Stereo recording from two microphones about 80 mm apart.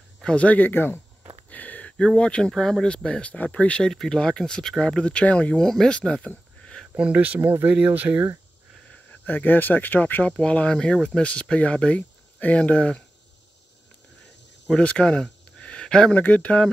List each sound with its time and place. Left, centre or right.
0.2 s speech: centre
1.5 s a sound: centre
2.0 s speech: centre
7.0 s speech: centre
8.9 s speech: left
14.7 s speech: centre